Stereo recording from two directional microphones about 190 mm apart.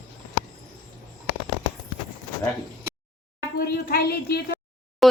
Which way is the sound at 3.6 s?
55° left (ahead or behind).